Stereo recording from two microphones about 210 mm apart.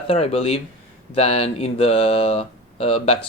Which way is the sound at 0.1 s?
30° left (ahead or behind).